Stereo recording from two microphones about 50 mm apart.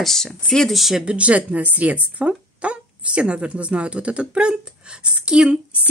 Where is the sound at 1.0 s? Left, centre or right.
Right.